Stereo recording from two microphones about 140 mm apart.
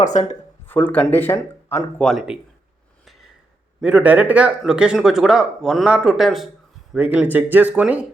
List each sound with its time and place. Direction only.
0.0 s speech: 60° left (ahead or behind)
0.6 s speech: 10° left (ahead or behind)
2.0 s speech: 5° right (ahead or behind)
3.0 s a sound: centre (ahead or behind)
3.8 s speech: 10° right (ahead or behind)